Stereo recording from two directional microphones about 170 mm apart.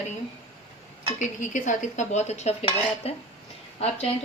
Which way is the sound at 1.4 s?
45° left (ahead or behind).